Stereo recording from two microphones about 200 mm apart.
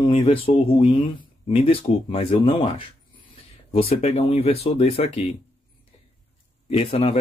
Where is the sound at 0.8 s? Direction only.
25° left (ahead or behind).